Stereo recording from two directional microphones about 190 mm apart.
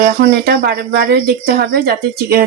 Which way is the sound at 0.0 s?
55° right (ahead or behind).